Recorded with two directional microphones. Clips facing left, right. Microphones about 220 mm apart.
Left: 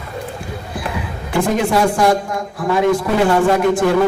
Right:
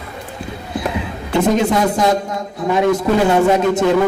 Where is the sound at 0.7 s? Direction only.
20° right (ahead or behind).